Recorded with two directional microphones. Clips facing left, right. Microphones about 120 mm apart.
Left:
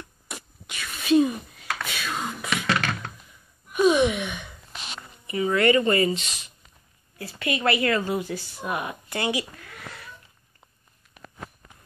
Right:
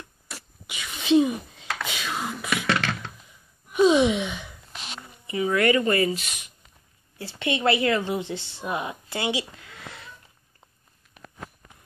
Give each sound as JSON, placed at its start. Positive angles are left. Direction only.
{"t": 0.7, "sound": "whispering", "side_deg": -15}
{"t": 3.7, "sound": "a sound", "side_deg": -20}
{"t": 5.2, "sound": "speech", "side_deg": -10}
{"t": 7.2, "sound": "a woman's voice", "side_deg": -25}